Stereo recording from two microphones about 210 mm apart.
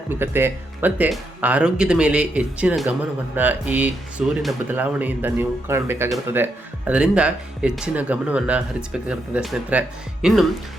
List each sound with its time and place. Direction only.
0.1 s speech: 10° right (ahead or behind)